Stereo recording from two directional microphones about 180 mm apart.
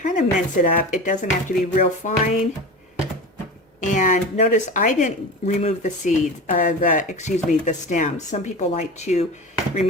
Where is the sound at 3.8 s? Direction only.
45° left (ahead or behind).